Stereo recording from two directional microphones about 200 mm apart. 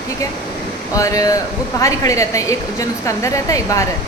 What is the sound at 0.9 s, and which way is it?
A woman's voice, 15° left (ahead or behind).